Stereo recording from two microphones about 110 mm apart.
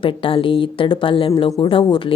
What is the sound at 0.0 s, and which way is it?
A woman's voice, 55° left (ahead or behind).